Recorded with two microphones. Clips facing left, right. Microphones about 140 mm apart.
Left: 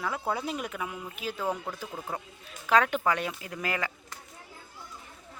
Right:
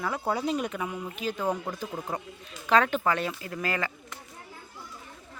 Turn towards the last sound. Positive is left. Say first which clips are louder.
# right 2 dB
turn(degrees=15)  # may be behind; listen again after turning